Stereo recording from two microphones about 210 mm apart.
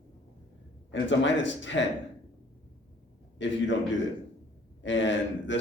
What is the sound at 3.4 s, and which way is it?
Speech, 60° left (ahead or behind).